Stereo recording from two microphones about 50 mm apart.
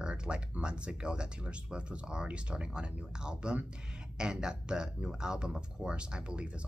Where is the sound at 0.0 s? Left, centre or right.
Centre.